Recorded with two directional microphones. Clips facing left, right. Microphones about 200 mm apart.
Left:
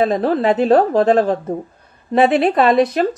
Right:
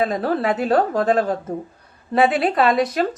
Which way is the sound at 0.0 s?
25° left (ahead or behind).